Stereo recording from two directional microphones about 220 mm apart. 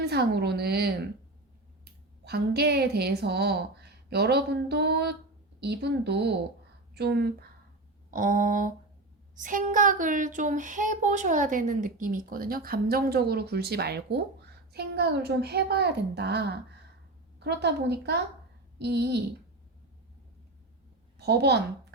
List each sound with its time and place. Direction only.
0.0 s a child's voice: 45° right (ahead or behind)
21.2 s a child's voice: 50° right (ahead or behind)